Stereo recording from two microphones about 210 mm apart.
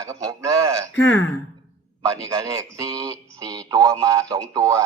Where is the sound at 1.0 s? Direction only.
65° left (ahead or behind).